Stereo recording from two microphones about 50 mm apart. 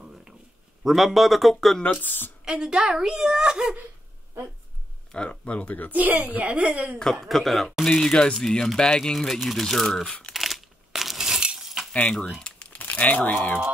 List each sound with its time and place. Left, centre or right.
0.8 s speech: centre
2.0 s a woman's voice: left
2.4 s a woman's voice: centre
5.1 s speech: left
5.9 s a woman's voice: right
7.0 s speech: centre
10.3 s a sound: centre
11.4 s cutlery: centre
12.4 s crumpling: left
12.8 s speech: left